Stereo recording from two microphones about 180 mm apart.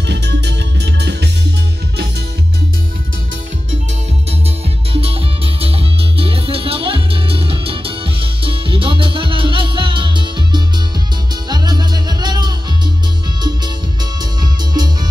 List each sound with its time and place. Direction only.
0.0 s music: 70° right (ahead or behind)
4.9 s music: 30° right (ahead or behind)
14.4 s music: 20° right (ahead or behind)